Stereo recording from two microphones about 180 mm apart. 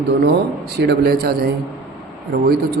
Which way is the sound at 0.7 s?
65° right (ahead or behind).